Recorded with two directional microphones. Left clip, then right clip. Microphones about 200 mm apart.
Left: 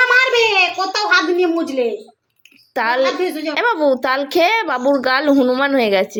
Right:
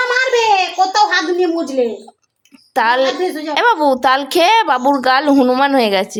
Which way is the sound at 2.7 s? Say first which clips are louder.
Right 3 dB; 15° right (ahead or behind).